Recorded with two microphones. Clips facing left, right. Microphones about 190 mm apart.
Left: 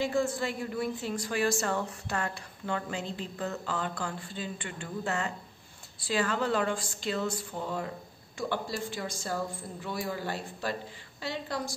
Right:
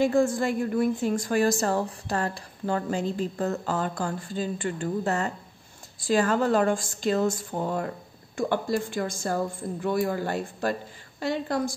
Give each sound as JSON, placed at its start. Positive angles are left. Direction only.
{"t": 0.0, "sound": "a woman's voice", "side_deg": -50}